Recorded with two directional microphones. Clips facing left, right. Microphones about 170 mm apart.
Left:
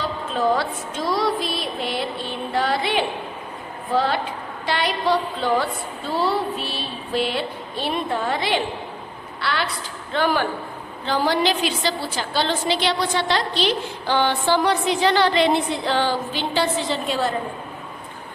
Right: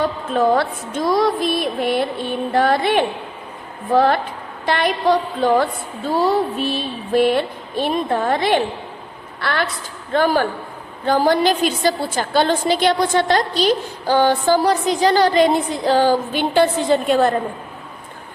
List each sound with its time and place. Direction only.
0.0 s a woman's voice: 55° right (ahead or behind)